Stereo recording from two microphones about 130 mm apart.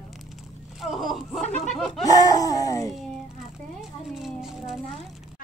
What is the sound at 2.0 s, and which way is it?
Speech, 30° left (ahead or behind).